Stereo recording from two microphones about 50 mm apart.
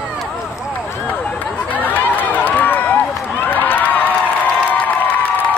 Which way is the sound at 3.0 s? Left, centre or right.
Left.